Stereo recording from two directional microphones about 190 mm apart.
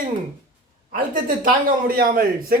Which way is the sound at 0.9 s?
45° right (ahead or behind).